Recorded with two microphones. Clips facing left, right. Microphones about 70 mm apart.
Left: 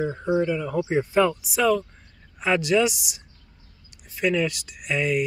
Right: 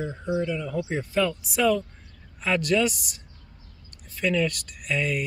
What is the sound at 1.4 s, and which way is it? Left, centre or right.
Speech, centre.